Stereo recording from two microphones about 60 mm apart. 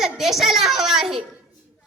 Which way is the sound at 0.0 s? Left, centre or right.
Centre.